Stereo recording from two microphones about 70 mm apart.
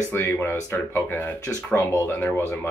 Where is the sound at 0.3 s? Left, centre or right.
Left.